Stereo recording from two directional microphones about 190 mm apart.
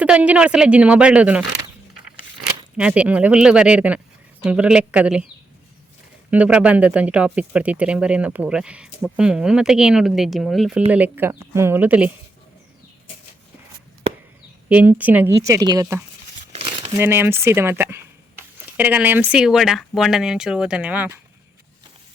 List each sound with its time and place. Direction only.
0.0 s speech: 5° right (ahead or behind)
2.7 s speech: 5° right (ahead or behind)
6.3 s speech: 5° right (ahead or behind)
14.7 s speech: 10° right (ahead or behind)
16.5 s crumpling: 30° right (ahead or behind)
17.0 s speech: 10° right (ahead or behind)